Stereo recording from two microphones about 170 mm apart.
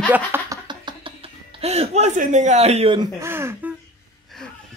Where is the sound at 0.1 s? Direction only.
15° right (ahead or behind).